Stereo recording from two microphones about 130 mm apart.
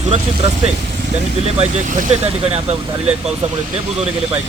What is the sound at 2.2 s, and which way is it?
Speech, 50° right (ahead or behind).